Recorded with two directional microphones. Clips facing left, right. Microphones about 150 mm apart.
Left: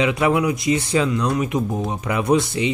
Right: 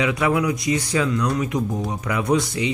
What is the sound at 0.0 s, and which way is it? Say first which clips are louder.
Speech: left 2 dB; 25° left (ahead or behind).